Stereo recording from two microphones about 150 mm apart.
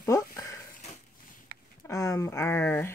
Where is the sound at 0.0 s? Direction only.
20° left (ahead or behind).